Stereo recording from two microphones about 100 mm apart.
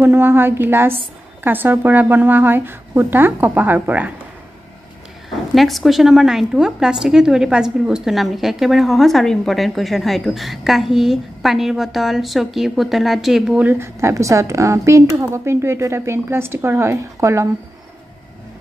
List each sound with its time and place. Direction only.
0.0 s speech: 25° right (ahead or behind)
5.5 s a woman's voice: centre (ahead or behind)
13.6 s speech: 15° right (ahead or behind)
14.0 s speech: 30° right (ahead or behind)